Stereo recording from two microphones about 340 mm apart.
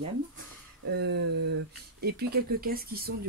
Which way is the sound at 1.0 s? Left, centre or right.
Right.